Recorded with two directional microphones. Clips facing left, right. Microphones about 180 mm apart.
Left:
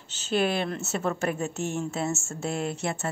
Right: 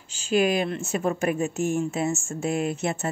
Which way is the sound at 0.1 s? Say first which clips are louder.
Right 4 dB; 10° right (ahead or behind).